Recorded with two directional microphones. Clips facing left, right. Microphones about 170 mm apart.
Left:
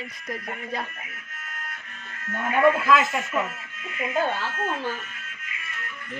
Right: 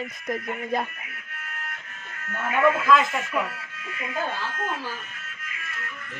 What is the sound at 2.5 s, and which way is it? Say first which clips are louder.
Speech: left 2 dB; 35° left (ahead or behind).